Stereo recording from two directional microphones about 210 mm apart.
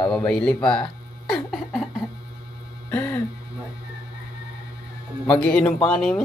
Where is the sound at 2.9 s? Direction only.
10° left (ahead or behind).